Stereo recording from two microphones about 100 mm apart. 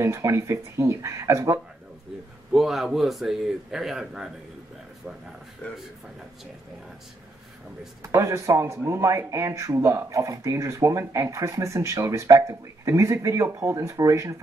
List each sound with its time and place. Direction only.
0.0 s speech: 30° right (ahead or behind)
2.5 s a man's voice: centre (ahead or behind)
5.6 s speech: 20° left (ahead or behind)
8.0 s speech: 30° right (ahead or behind)